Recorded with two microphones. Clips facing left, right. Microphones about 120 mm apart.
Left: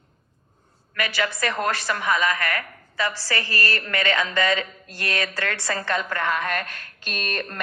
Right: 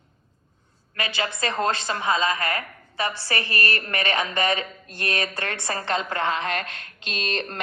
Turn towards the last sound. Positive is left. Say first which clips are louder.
# right 1 dB
turn(degrees=-25)  # may be behind; listen again after turning